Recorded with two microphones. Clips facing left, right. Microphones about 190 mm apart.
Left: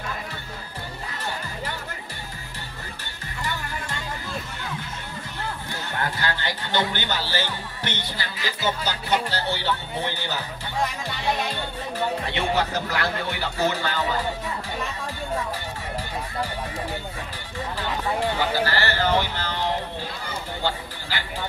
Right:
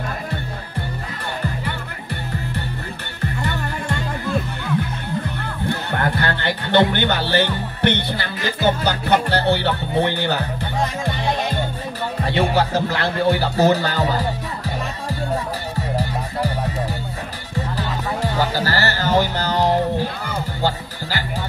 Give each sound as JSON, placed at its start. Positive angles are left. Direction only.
{"t": 5.7, "sound": "speech", "side_deg": -60}
{"t": 12.3, "sound": "speech", "side_deg": -35}
{"t": 18.2, "sound": "music", "side_deg": -40}